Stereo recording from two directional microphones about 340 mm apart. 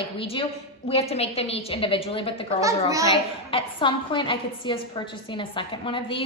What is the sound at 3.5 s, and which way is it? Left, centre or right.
A woman's voice, centre.